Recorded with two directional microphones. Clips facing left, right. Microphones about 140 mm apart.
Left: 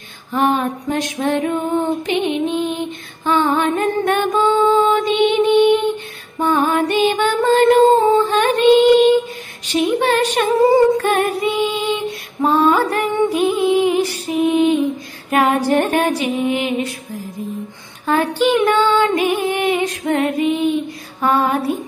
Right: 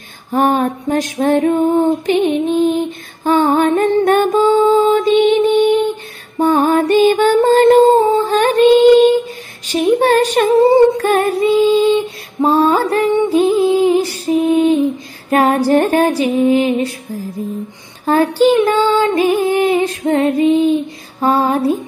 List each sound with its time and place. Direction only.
0.3 s female singing: 45° right (ahead or behind)
3.3 s music: 45° right (ahead or behind)
9.7 s female singing: 40° right (ahead or behind)
11.8 s music: 25° right (ahead or behind)
15.2 s female singing: 35° right (ahead or behind)
18.0 s music: 35° right (ahead or behind)
21.2 s female singing: 30° right (ahead or behind)